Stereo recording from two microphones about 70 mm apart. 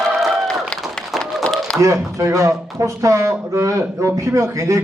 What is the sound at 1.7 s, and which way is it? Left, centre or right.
Speech, right.